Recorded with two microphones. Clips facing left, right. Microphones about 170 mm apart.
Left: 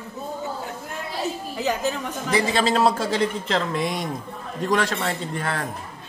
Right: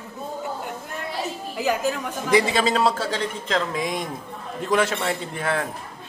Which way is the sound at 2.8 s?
10° left (ahead or behind).